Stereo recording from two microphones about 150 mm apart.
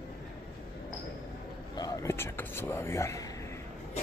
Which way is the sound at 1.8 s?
25° left (ahead or behind).